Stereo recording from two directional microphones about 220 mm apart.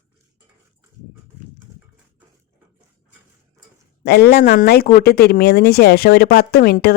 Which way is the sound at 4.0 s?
45° left (ahead or behind).